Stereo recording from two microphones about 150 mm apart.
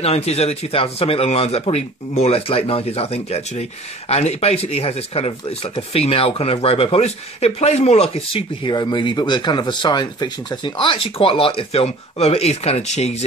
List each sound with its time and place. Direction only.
0.0 s speech: 45° left (ahead or behind)